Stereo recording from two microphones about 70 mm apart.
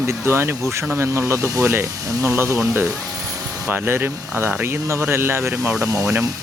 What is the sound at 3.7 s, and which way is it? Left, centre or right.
Speech, right.